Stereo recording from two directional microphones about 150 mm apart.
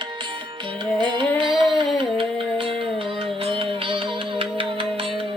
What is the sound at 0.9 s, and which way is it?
Music, 30° right (ahead or behind).